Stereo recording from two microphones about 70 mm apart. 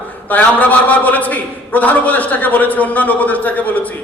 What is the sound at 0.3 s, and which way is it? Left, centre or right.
A man's voice, left.